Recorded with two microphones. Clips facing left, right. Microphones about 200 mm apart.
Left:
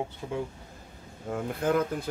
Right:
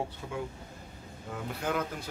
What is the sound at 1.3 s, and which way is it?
Speech, 50° left (ahead or behind).